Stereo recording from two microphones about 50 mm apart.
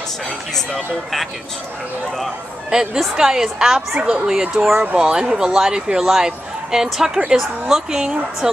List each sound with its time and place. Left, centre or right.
0.6 s speech: centre
2.7 s speech: centre
3.9 s speech: right